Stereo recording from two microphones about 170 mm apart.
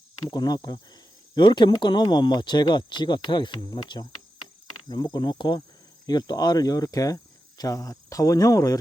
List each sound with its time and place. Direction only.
0.3 s speech: 25° left (ahead or behind)